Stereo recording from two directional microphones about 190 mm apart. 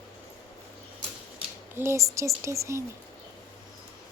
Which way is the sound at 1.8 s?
15° right (ahead or behind).